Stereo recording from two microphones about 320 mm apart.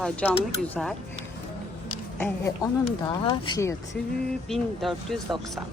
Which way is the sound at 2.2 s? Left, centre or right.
Centre.